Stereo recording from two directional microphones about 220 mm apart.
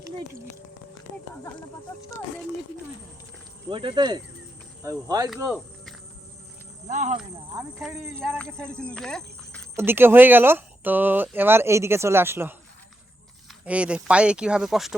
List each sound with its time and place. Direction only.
3.7 s speech: 20° right (ahead or behind)
6.8 s speech: 35° right (ahead or behind)
7.8 s speech: centre (ahead or behind)
9.7 s speech: 10° right (ahead or behind)
13.7 s speech: 5° right (ahead or behind)